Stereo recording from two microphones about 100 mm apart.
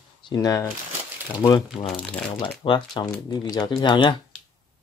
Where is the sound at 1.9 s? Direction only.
5° left (ahead or behind).